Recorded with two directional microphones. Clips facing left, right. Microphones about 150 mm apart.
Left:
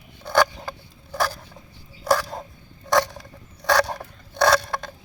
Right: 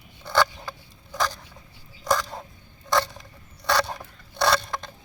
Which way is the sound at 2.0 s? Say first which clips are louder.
Left 3 dB; 10° left (ahead or behind).